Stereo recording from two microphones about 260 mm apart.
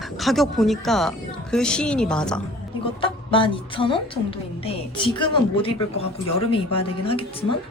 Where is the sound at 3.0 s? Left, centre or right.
Centre.